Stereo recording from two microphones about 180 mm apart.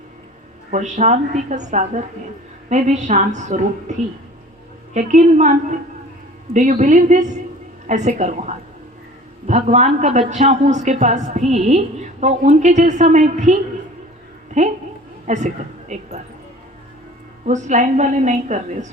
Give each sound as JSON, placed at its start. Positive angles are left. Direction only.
{"t": 0.7, "sound": "a woman's voice", "side_deg": -40}
{"t": 4.9, "sound": "a woman's voice", "side_deg": -40}
{"t": 17.4, "sound": "a woman's voice", "side_deg": -40}